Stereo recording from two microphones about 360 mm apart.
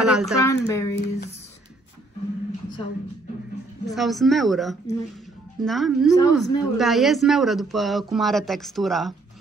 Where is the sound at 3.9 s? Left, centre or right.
Centre.